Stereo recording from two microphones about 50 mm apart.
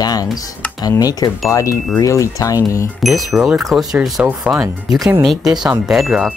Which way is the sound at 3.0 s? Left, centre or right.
Centre.